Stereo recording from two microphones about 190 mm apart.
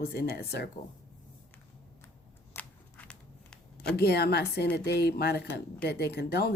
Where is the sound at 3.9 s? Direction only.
55° left (ahead or behind).